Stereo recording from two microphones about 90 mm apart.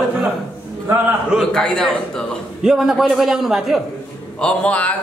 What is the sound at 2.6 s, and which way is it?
A man's voice, 5° right (ahead or behind).